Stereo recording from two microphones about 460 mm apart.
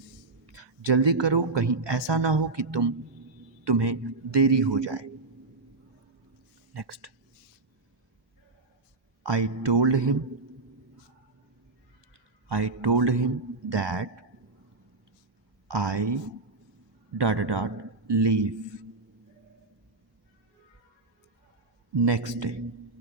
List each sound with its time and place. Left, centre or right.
0.5 s a man's voice: right
6.7 s a man's voice: right
9.2 s speech: right
12.1 s a man's voice: right
15.6 s speech: right
17.2 s a man's voice: right
22.0 s speech: right